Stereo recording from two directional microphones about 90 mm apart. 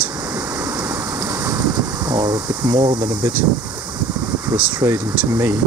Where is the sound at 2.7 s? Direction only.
50° right (ahead or behind).